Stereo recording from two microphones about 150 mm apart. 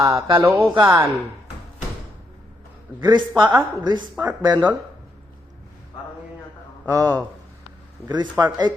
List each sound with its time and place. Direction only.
0.0 s speech: 20° right (ahead or behind)
3.0 s speech: 30° right (ahead or behind)
6.8 s speech: 20° right (ahead or behind)